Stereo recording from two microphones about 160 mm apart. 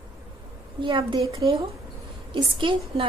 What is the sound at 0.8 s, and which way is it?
A woman's voice, 30° right (ahead or behind).